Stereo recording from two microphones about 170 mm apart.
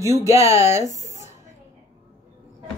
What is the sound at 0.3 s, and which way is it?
Speech, 15° right (ahead or behind).